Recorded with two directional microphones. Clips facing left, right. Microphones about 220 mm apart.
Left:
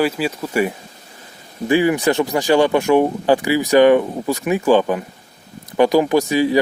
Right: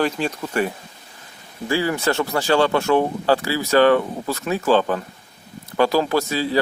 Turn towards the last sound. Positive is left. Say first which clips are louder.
# left 5 dB
turn(degrees=15)  # may be behind; listen again after turning